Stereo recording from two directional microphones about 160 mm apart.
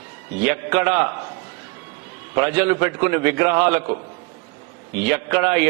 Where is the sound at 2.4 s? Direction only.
15° right (ahead or behind).